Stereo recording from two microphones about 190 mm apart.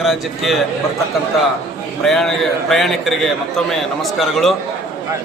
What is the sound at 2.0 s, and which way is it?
Speech, centre (ahead or behind).